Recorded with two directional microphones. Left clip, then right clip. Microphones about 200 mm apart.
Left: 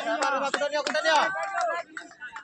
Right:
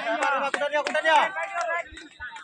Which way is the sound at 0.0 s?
60° left (ahead or behind).